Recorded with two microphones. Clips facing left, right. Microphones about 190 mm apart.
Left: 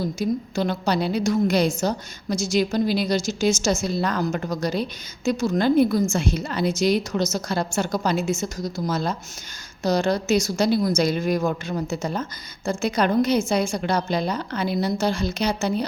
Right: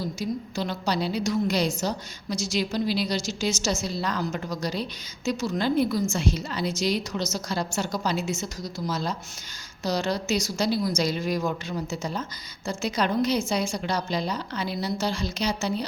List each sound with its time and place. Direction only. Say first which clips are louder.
0.0 s a woman's voice: left 5 dB; 50° left (ahead or behind)